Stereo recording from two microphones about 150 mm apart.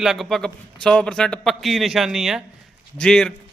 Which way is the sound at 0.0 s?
Centre (ahead or behind).